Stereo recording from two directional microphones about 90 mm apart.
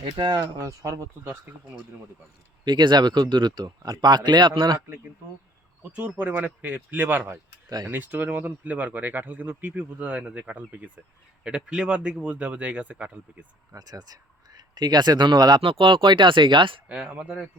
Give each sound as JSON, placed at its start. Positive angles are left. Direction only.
{"t": 0.0, "sound": "speech", "side_deg": -60}
{"t": 0.6, "sound": "speech", "side_deg": -35}
{"t": 2.6, "sound": "speech", "side_deg": -55}
{"t": 5.9, "sound": "speech", "side_deg": -15}
{"t": 13.7, "sound": "speech", "side_deg": -45}
{"t": 15.6, "sound": "speech", "side_deg": -75}
{"t": 16.9, "sound": "speech", "side_deg": -10}